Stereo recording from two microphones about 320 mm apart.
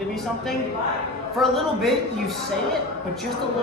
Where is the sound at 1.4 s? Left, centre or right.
Centre.